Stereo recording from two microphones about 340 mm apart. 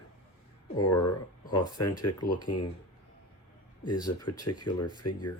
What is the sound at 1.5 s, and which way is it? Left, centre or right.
Speech, left.